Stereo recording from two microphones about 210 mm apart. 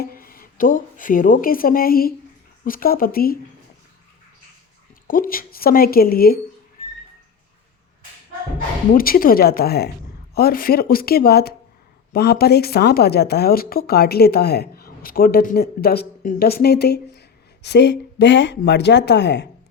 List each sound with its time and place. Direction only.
0.0 s a woman's voice: 45° left (ahead or behind)
5.0 s a woman's voice: 40° left (ahead or behind)
8.9 s a woman's voice: 45° left (ahead or behind)